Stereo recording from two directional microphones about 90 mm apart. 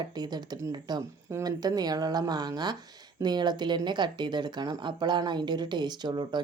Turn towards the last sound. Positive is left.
turn(degrees=-55)  # may be behind; listen again after turning